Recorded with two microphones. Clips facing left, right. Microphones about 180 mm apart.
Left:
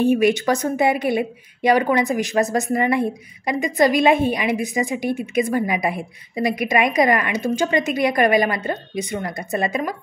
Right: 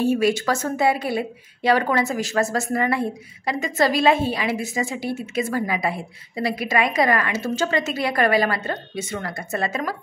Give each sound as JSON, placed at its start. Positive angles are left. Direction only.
{"t": 0.0, "sound": "speech", "side_deg": 20}